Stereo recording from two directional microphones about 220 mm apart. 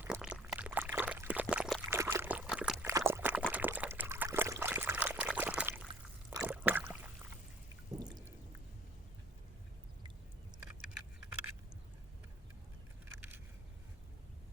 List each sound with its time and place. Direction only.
0.1 s pour: 5° right (ahead or behind)
2.0 s trickle: 10° right (ahead or behind)
3.1 s a sound: 10° right (ahead or behind)
7.9 s pour: 15° right (ahead or behind)